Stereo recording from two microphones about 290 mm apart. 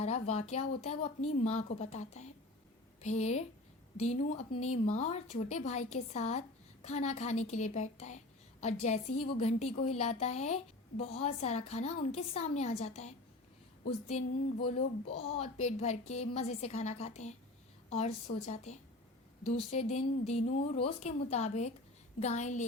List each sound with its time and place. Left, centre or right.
0.0 s a woman's voice: left